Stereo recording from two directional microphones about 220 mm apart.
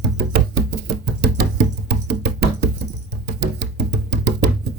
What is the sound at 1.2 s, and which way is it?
Music, 50° right (ahead or behind).